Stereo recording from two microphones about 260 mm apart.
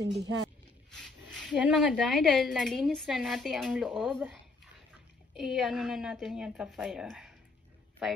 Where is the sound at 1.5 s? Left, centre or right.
Centre.